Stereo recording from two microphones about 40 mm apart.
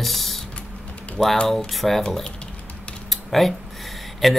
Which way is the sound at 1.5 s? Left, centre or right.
Centre.